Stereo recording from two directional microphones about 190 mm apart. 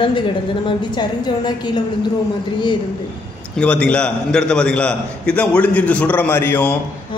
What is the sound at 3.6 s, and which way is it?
A man's voice, 5° left (ahead or behind).